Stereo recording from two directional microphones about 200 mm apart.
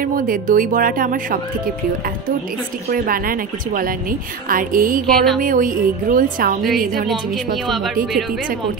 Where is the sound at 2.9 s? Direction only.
45° right (ahead or behind).